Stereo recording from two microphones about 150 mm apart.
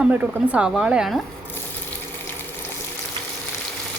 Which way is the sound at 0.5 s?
5° right (ahead or behind).